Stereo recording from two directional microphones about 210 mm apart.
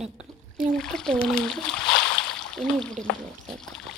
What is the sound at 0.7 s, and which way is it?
Speech, 5° left (ahead or behind).